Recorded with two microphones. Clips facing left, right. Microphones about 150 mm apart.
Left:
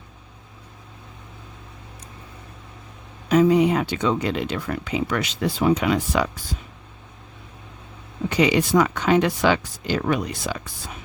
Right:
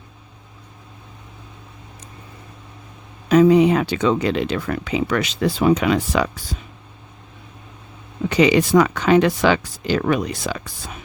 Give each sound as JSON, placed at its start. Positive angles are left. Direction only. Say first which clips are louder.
{"t": 3.2, "sound": "speech", "louder": "right 4 dB", "side_deg": -85}
{"t": 8.3, "sound": "speech", "louder": "right 4 dB", "side_deg": -90}